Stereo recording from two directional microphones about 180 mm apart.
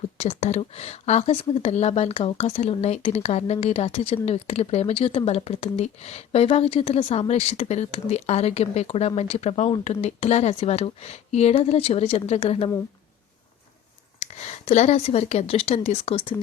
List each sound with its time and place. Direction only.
0.2 s speech: 40° left (ahead or behind)
14.2 s speech: 40° left (ahead or behind)